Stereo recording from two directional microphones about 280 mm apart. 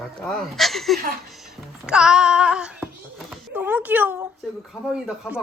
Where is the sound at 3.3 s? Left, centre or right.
Centre.